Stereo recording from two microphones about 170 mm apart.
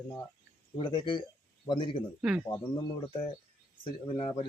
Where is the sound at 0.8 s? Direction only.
30° left (ahead or behind).